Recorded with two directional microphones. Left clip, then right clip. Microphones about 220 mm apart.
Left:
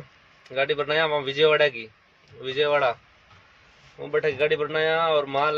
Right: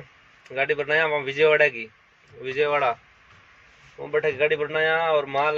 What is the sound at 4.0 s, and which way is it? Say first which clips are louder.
Speech: right 1 dB; 10° left (ahead or behind).